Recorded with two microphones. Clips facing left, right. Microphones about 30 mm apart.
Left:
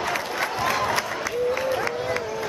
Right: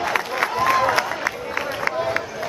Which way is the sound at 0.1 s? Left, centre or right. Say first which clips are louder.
Right 4 dB; centre.